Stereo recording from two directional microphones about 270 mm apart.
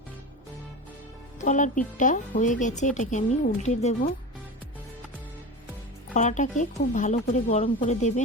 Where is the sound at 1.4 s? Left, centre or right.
Left.